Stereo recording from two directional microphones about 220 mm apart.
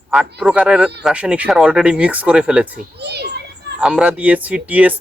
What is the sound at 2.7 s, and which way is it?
Children playing, 50° right (ahead or behind).